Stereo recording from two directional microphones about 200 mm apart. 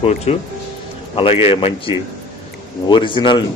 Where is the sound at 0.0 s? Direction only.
30° left (ahead or behind).